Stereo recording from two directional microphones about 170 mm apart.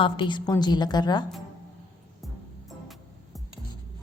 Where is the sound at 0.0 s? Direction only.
30° left (ahead or behind).